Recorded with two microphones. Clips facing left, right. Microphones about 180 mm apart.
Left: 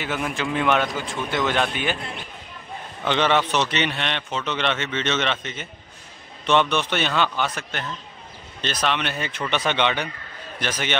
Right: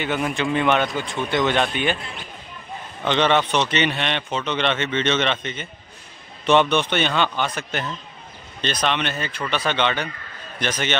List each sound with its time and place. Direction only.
0.0 s speech: centre (ahead or behind)
3.1 s a man's voice: 5° left (ahead or behind)